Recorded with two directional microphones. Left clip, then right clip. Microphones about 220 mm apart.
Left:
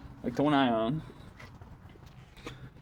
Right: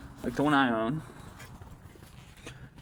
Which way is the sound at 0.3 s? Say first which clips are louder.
Right 1 dB; 10° left (ahead or behind).